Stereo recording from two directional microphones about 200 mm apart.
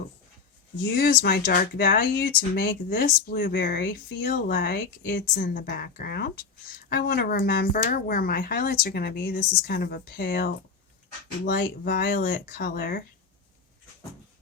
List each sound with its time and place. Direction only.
0.9 s speech: 50° left (ahead or behind)